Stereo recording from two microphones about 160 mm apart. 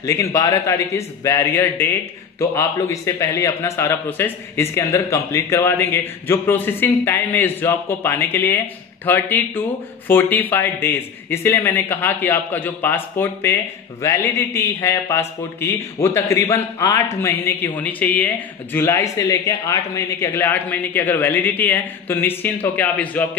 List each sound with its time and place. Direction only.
0.0 s a man's voice: 20° left (ahead or behind)